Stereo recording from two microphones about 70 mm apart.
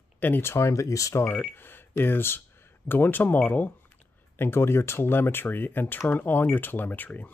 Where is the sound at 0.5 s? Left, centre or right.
Left.